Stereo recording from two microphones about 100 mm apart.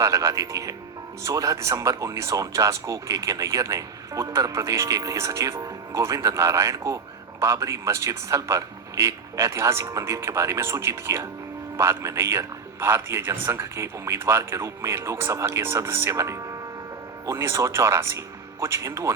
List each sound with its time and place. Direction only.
0.0 s a man's voice: 35° right (ahead or behind)